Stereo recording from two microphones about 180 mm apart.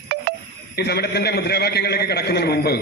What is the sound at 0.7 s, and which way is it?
A man's voice, 65° left (ahead or behind).